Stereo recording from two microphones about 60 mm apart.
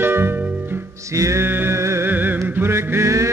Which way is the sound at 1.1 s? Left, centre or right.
Right.